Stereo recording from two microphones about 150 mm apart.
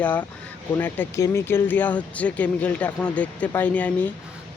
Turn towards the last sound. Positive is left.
turn(degrees=10)  # may be behind; listen again after turning